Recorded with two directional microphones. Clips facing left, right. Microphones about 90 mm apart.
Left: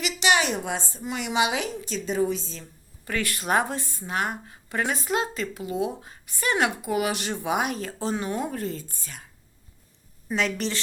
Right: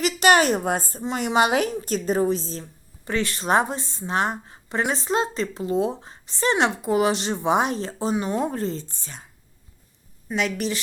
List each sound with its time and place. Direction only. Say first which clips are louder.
0.0 s a woman's voice: right 5 dB; 45° right (ahead or behind)
3.0 s speech: right 4 dB; 25° right (ahead or behind)
10.2 s a woman's voice: right 2 dB; 5° right (ahead or behind)